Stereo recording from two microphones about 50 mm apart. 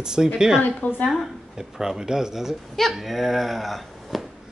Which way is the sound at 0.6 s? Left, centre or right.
Left.